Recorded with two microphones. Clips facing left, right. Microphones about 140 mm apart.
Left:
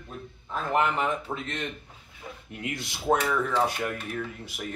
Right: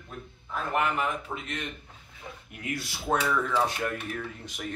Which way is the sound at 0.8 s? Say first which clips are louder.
Left 2 dB; 30° left (ahead or behind).